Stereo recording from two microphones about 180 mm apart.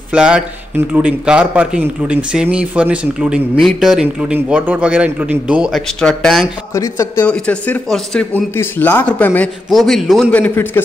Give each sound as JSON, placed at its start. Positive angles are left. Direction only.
{"t": 0.1, "sound": "a man's voice", "side_deg": -5}
{"t": 6.7, "sound": "speech", "side_deg": 20}
{"t": 7.2, "sound": "speech", "side_deg": 5}
{"t": 10.4, "sound": "speech", "side_deg": 10}